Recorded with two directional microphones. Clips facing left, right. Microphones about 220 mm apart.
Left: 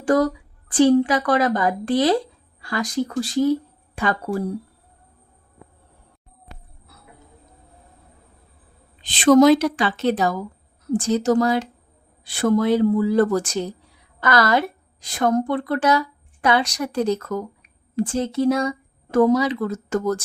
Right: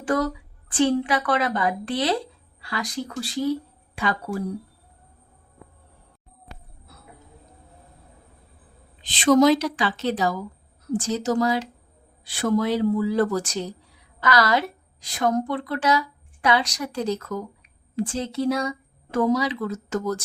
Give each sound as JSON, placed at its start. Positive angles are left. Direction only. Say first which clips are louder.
{"t": 0.0, "sound": "a woman's voice", "louder": "left 5 dB", "side_deg": 40}
{"t": 9.2, "sound": "a woman's voice", "louder": "left 4 dB", "side_deg": 55}